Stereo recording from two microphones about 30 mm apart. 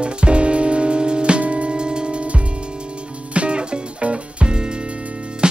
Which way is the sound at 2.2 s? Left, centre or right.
Right.